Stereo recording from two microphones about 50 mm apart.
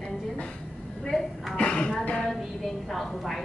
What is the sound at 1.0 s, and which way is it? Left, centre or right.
Speech, centre.